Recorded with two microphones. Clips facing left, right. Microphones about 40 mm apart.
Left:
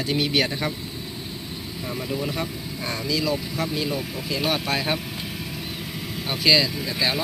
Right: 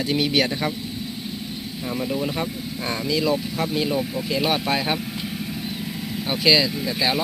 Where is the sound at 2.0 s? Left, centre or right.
Centre.